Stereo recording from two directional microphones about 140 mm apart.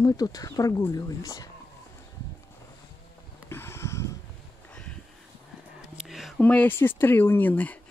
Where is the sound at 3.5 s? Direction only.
15° left (ahead or behind).